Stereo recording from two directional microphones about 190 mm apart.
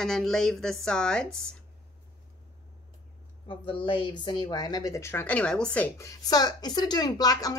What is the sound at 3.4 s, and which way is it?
A woman's voice, 25° left (ahead or behind).